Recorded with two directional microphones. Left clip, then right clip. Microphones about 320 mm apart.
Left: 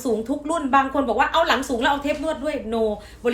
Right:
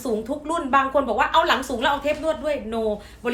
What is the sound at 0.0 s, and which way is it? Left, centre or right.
A woman's voice, centre.